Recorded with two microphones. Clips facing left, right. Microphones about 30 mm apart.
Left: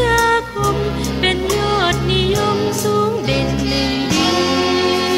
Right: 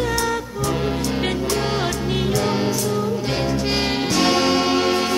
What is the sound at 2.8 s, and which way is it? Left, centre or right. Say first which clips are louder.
Music: left 6 dB; left.